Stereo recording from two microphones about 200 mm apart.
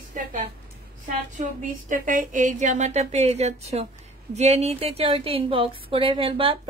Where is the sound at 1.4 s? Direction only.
40° right (ahead or behind).